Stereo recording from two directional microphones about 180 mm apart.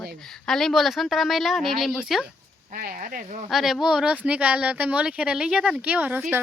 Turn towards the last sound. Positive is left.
turn(degrees=-10)  # may be behind; listen again after turning